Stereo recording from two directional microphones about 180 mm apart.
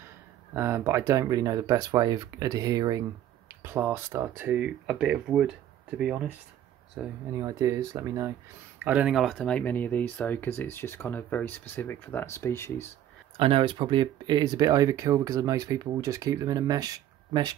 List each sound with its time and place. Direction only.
0.6 s speech: 15° right (ahead or behind)
7.3 s speech: 20° right (ahead or behind)
8.8 s speech: 5° right (ahead or behind); by 12.8 s 15° left (ahead or behind)
13.4 s speech: 30° right (ahead or behind)